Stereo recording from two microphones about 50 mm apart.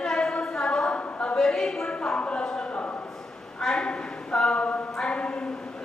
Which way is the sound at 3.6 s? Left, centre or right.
Centre.